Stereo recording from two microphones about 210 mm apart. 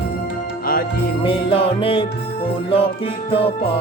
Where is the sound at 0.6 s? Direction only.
45° left (ahead or behind).